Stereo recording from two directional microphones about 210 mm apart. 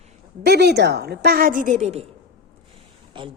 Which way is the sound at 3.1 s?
25° right (ahead or behind).